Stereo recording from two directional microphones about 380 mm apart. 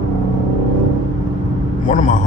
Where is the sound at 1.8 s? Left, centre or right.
Centre.